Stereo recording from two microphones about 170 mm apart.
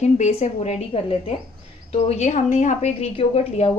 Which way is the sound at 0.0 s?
40° left (ahead or behind).